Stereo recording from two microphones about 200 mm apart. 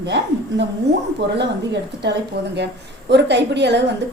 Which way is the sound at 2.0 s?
55° right (ahead or behind).